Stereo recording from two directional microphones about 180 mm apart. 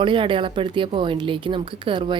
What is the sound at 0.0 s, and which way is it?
A woman's voice, 30° right (ahead or behind).